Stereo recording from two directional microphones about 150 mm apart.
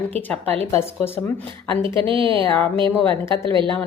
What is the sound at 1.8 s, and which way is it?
Speech, 35° right (ahead or behind).